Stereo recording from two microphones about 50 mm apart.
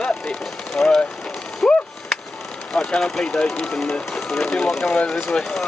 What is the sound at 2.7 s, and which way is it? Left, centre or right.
Speech, centre.